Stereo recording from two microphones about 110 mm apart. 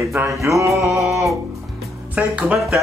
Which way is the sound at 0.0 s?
25° right (ahead or behind).